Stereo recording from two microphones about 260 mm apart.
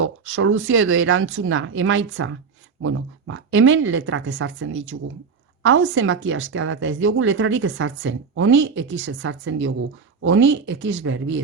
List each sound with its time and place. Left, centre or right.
0.0 s speech: right